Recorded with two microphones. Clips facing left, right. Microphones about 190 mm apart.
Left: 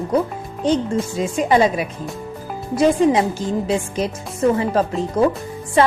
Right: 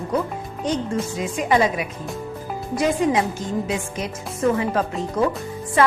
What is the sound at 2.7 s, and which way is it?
Speech, 30° left (ahead or behind).